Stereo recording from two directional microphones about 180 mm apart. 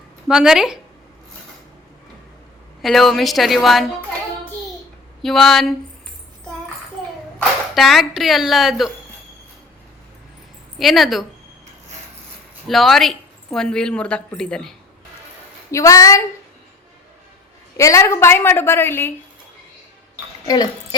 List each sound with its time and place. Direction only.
0.3 s a woman's voice: 5° right (ahead or behind)
2.8 s a woman's voice: centre (ahead or behind)
5.2 s a woman's voice: centre (ahead or behind)
7.8 s a woman's voice: centre (ahead or behind)
10.8 s a woman's voice: centre (ahead or behind)
12.6 s a woman's voice: centre (ahead or behind)
15.7 s a woman's voice: 20° left (ahead or behind)
17.7 s a woman's voice: 15° left (ahead or behind)